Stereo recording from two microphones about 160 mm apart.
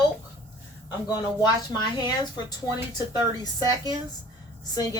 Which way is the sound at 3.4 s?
25° left (ahead or behind).